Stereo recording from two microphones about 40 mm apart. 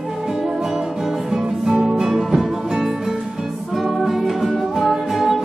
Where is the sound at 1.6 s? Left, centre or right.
Centre.